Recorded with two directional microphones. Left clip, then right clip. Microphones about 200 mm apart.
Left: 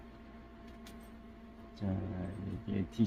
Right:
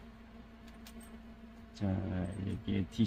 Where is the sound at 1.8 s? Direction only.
25° right (ahead or behind).